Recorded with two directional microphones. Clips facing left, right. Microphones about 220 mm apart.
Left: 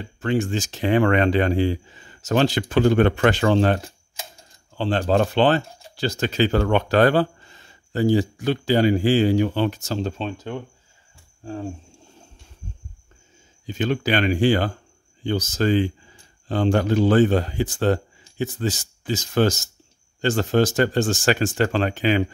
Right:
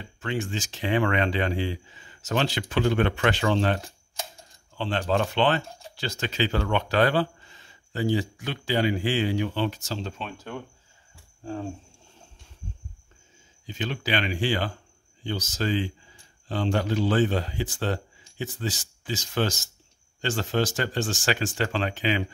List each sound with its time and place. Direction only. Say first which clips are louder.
0.2 s speech: left 7 dB; 40° left (ahead or behind)
10.1 s speech: left 7 dB; 25° left (ahead or behind)
13.7 s speech: left 7 dB; 50° left (ahead or behind)